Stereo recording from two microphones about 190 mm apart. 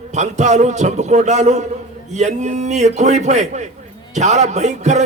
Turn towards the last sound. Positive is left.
turn(degrees=-35)  # may be behind; listen again after turning